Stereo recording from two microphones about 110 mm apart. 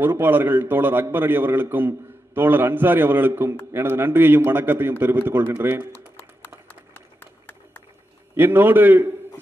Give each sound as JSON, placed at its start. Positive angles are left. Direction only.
{"t": 0.0, "sound": "a man's voice", "side_deg": -20}
{"t": 6.1, "sound": "a sound", "side_deg": 20}
{"t": 8.4, "sound": "a man's voice", "side_deg": -20}